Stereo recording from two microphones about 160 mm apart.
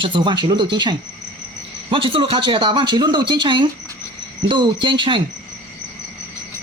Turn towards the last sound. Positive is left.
turn(degrees=-30)  # may be behind; listen again after turning